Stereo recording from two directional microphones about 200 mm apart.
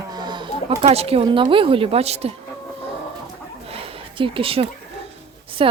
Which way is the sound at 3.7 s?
30° right (ahead or behind).